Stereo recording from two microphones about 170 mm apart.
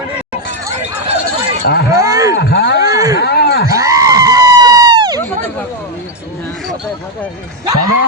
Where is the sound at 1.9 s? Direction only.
20° right (ahead or behind).